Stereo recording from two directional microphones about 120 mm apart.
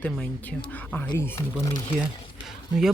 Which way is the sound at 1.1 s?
20° left (ahead or behind).